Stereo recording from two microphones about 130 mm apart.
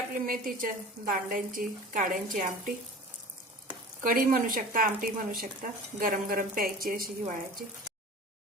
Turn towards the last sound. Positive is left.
turn(degrees=-90)